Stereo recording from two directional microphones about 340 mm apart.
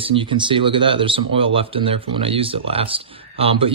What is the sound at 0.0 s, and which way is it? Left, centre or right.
Speech, centre.